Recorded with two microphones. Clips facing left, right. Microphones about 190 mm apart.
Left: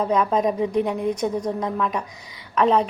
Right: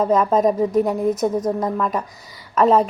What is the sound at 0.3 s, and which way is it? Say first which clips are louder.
Speech: right 4 dB; 45° right (ahead or behind).